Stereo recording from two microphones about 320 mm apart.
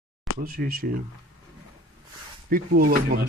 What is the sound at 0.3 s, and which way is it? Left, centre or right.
Speech, right.